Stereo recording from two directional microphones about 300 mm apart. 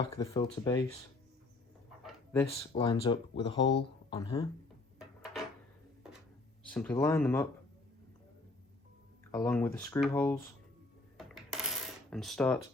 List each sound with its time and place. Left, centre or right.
0.0 s speech: centre
2.0 s a sound: centre
2.5 s speech: centre
4.9 s a sound: centre
6.7 s speech: centre
9.3 s speech: centre
11.2 s coin: centre